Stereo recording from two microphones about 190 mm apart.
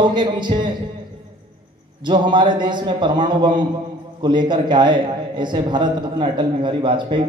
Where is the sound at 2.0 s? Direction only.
25° right (ahead or behind).